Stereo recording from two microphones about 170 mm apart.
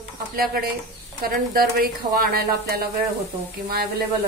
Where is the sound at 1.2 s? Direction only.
60° right (ahead or behind).